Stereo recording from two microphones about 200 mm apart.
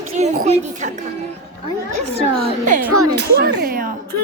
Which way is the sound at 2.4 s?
40° right (ahead or behind).